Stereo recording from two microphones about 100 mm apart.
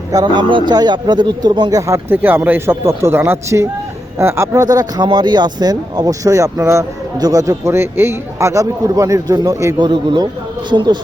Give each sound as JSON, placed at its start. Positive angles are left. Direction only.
{"t": 0.1, "sound": "speech", "side_deg": -40}
{"t": 1.9, "sound": "speech", "side_deg": -20}
{"t": 4.6, "sound": "speech", "side_deg": -40}
{"t": 9.7, "sound": "speech", "side_deg": -50}